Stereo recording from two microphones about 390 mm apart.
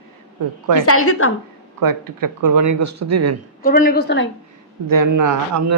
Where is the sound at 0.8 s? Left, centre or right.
Left.